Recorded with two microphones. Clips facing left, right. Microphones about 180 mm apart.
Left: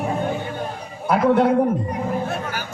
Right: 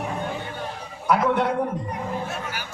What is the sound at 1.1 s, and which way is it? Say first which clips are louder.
Speech: left 4 dB; 30° left (ahead or behind).